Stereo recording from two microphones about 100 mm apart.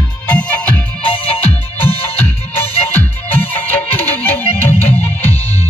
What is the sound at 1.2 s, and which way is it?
Music, 75° left (ahead or behind).